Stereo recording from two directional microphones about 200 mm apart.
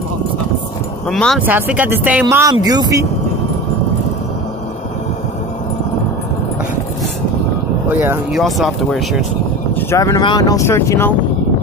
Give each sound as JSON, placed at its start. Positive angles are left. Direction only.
{"t": 1.0, "sound": "speech", "side_deg": 0}
{"t": 7.9, "sound": "speech", "side_deg": -10}
{"t": 9.8, "sound": "speech", "side_deg": 15}